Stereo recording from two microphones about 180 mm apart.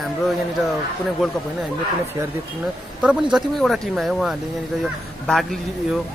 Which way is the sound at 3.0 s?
Centre (ahead or behind).